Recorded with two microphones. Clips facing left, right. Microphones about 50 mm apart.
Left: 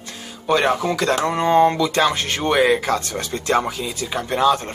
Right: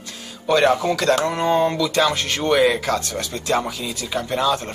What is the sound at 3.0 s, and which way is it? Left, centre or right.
Speech, left.